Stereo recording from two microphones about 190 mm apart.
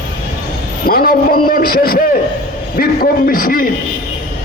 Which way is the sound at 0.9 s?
50° left (ahead or behind).